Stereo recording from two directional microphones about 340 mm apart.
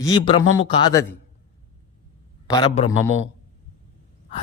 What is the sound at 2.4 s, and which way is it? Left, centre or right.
Speech, centre.